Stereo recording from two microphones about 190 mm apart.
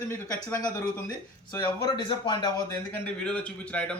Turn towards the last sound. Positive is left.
turn(degrees=5)  # may be behind; listen again after turning